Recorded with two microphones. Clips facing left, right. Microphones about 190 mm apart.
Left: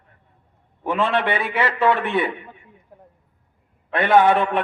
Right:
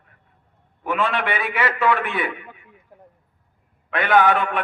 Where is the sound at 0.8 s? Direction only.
30° left (ahead or behind).